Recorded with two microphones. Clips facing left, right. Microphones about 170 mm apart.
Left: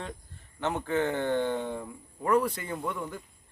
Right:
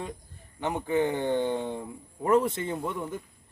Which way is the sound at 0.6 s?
15° right (ahead or behind).